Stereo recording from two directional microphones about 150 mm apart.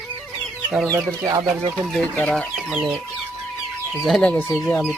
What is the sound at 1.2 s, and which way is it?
Speech, 30° right (ahead or behind).